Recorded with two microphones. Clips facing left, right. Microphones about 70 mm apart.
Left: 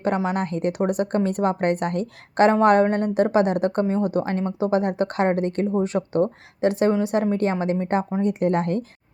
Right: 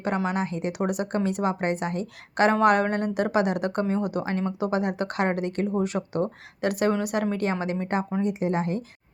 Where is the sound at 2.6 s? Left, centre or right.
Left.